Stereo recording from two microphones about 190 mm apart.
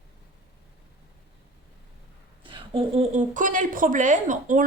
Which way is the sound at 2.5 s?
30° right (ahead or behind).